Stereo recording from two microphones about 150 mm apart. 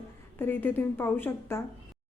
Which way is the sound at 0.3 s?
15° left (ahead or behind).